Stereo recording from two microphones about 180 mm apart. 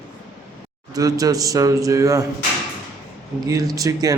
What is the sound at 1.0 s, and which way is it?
A man's voice, 20° right (ahead or behind).